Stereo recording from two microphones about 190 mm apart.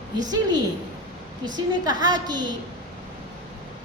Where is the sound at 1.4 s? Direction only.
20° right (ahead or behind).